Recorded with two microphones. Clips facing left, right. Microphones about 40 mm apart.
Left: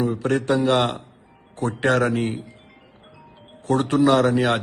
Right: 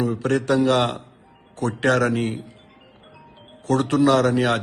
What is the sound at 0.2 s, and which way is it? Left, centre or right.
A man's voice, centre.